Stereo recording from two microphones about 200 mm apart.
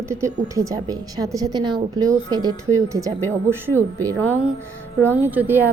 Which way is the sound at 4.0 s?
10° left (ahead or behind).